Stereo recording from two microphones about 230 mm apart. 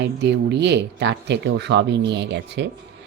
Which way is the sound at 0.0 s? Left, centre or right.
Right.